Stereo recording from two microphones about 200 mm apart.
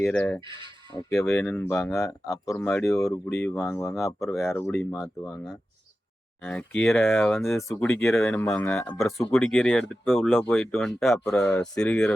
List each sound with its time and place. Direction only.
0.0 s speech: 10° left (ahead or behind)
0.4 s speech: 25° right (ahead or behind)
1.1 s speech: 15° left (ahead or behind)
6.4 s speech: 5° left (ahead or behind)
9.3 s speech: centre (ahead or behind)
11.3 s speech: 10° left (ahead or behind)
11.8 s speech: 5° left (ahead or behind)